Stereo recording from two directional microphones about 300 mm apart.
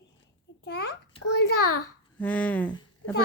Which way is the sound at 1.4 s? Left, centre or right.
Left.